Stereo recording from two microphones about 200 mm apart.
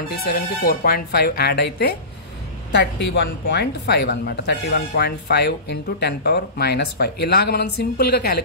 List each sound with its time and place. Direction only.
0.1 s speech: 50° left (ahead or behind)